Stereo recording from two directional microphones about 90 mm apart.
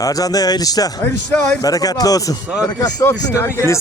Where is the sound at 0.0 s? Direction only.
40° left (ahead or behind).